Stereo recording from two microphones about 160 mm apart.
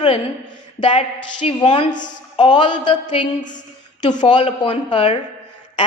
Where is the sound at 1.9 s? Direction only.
55° left (ahead or behind).